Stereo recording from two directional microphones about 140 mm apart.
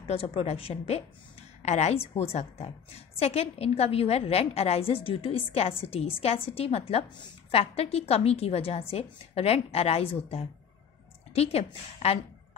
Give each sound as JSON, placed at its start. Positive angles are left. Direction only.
{"t": 0.0, "sound": "a woman's voice", "side_deg": 45}